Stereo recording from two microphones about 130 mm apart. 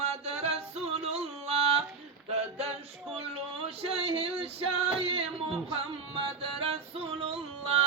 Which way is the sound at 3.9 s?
45° right (ahead or behind).